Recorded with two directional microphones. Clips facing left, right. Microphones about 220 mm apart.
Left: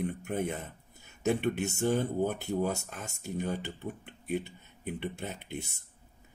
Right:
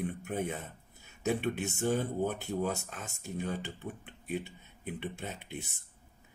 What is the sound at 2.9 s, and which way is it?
Speech, 65° left (ahead or behind).